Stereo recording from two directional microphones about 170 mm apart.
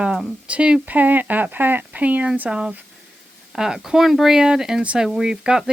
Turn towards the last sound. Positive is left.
turn(degrees=-5)  # may be behind; listen again after turning